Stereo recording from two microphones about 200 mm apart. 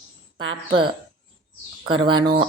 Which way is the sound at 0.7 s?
25° right (ahead or behind).